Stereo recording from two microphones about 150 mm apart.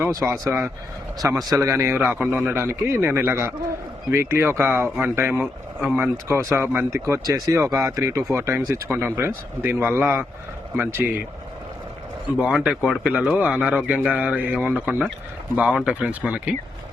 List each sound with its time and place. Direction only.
0.0 s speech: 20° right (ahead or behind)
0.4 s speech: centre (ahead or behind)
1.5 s speech: 20° right (ahead or behind)
12.4 s speech: 5° right (ahead or behind)